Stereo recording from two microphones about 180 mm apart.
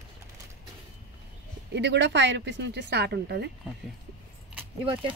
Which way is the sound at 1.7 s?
75° right (ahead or behind).